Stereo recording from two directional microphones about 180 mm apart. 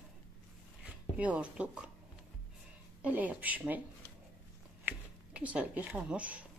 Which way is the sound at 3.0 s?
10° right (ahead or behind).